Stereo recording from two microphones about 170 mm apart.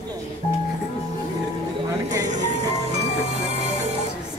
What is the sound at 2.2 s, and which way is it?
Music, 45° right (ahead or behind).